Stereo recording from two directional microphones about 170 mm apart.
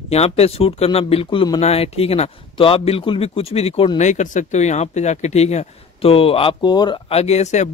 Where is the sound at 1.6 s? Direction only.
35° left (ahead or behind).